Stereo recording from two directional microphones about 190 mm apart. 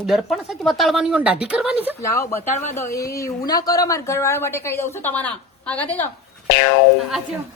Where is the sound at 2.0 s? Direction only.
15° left (ahead or behind).